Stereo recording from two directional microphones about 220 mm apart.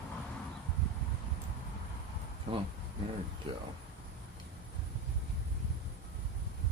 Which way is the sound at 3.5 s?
25° right (ahead or behind).